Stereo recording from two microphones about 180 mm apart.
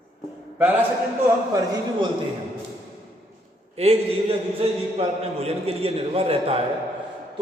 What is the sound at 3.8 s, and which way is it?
A man's voice, 35° right (ahead or behind).